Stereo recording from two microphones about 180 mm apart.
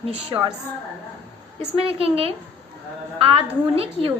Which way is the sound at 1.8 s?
30° right (ahead or behind).